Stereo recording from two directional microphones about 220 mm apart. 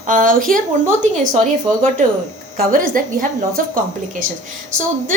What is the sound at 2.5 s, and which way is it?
Speech, 40° right (ahead or behind).